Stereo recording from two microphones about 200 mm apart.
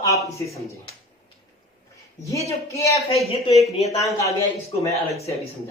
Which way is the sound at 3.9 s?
15° left (ahead or behind).